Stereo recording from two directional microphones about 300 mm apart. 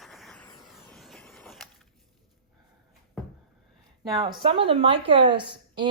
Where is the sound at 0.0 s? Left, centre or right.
Centre.